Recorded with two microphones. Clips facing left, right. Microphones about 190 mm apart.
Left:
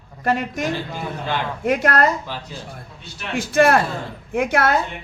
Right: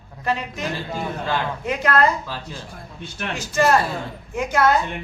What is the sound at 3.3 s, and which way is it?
A woman's voice, 55° left (ahead or behind).